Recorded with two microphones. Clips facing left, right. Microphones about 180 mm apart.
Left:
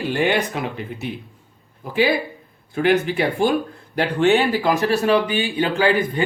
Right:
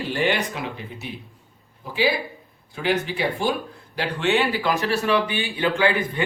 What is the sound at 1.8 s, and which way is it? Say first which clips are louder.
Speech: left 4 dB; 55° left (ahead or behind).